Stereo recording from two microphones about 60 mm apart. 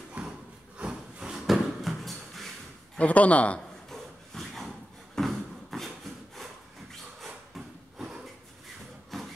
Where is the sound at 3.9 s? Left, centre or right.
Centre.